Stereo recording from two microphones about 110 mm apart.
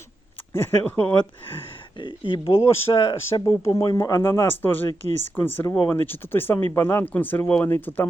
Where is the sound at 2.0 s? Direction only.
50° left (ahead or behind).